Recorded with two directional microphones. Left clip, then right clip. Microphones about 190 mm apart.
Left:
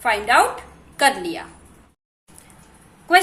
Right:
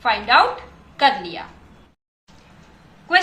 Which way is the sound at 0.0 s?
35° left (ahead or behind).